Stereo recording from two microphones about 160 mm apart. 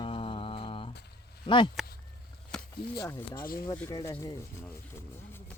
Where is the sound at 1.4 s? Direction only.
30° left (ahead or behind).